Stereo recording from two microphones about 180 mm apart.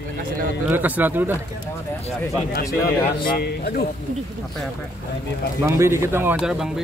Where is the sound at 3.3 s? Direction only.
60° left (ahead or behind).